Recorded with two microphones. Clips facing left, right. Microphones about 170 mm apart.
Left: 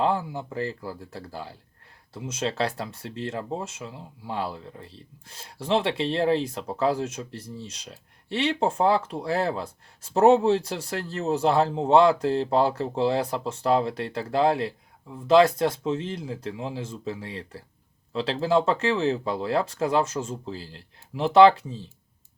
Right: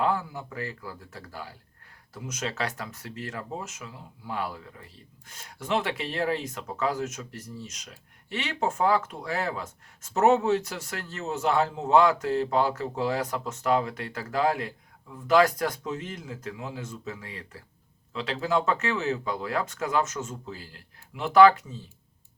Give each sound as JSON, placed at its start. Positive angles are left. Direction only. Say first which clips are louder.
{"t": 0.0, "sound": "speech", "louder": "left 2 dB", "side_deg": 30}